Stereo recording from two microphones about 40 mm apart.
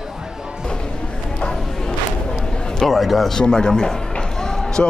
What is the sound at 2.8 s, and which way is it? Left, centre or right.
Speech, centre.